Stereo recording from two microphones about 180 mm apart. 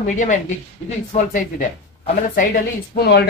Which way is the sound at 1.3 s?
45° left (ahead or behind).